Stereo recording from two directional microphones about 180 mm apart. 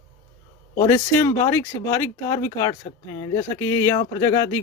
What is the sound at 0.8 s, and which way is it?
Speech, 15° left (ahead or behind).